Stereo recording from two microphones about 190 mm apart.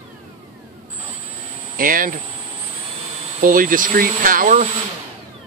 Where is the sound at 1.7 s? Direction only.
45° right (ahead or behind).